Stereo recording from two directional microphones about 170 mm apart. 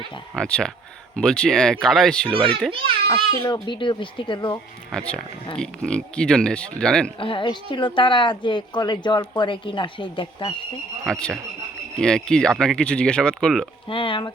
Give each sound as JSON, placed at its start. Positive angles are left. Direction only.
{"t": 0.3, "sound": "speech", "side_deg": 5}
{"t": 3.4, "sound": "a woman's voice", "side_deg": 25}
{"t": 4.9, "sound": "speech", "side_deg": 5}
{"t": 7.2, "sound": "a woman's voice", "side_deg": 30}
{"t": 11.0, "sound": "speech", "side_deg": 5}
{"t": 13.8, "sound": "speech", "side_deg": 30}